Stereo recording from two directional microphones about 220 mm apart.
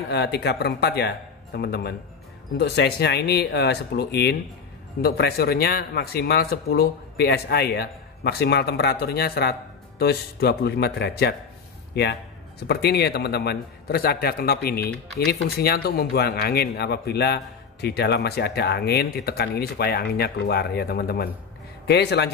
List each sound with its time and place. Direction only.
0.1 s a man's voice: 50° left (ahead or behind)